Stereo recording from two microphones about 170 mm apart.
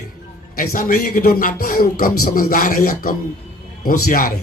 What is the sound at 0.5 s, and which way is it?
Speech, 60° left (ahead or behind).